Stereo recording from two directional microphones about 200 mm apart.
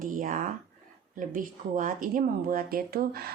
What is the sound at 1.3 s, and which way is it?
Speech, 40° right (ahead or behind).